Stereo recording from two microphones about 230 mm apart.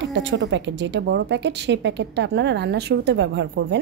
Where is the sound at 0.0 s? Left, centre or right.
Right.